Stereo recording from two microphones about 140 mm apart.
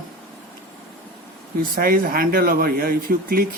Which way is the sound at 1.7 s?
90° right.